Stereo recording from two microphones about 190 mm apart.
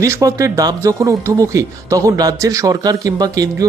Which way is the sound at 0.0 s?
15° right (ahead or behind).